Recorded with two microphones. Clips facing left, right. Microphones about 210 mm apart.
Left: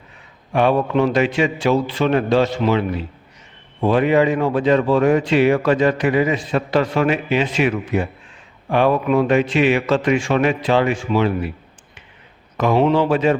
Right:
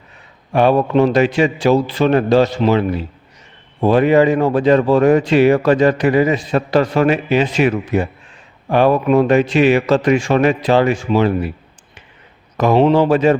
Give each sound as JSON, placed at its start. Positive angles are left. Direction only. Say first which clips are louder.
{"t": 0.5, "sound": "a man's voice", "louder": "right 3 dB", "side_deg": -40}
{"t": 12.9, "sound": "a man's voice", "louder": "right 4 dB", "side_deg": -40}